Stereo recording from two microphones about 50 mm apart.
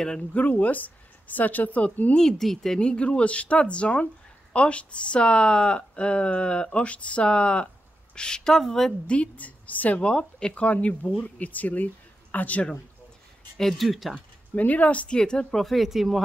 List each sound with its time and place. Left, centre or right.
0.3 s speech: left
2.1 s speech: centre
2.8 s speech: centre
9.0 s speech: left
13.6 s speech: centre
14.5 s speech: left
15.1 s speech: centre
15.6 s speech: centre